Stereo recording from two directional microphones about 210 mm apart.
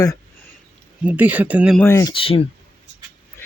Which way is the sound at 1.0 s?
5° right (ahead or behind).